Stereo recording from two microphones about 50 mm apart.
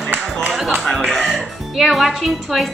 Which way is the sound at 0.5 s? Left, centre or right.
Centre.